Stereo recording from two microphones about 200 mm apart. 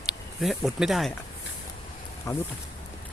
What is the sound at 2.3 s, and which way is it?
Speech, 15° left (ahead or behind).